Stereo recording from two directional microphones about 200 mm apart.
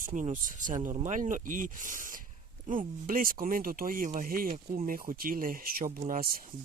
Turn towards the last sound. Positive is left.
turn(degrees=-45)  # may be behind; listen again after turning